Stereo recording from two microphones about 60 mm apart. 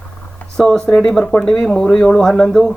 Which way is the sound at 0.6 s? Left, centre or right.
Centre.